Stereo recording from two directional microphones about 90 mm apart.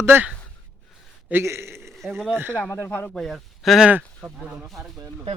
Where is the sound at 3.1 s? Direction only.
5° left (ahead or behind).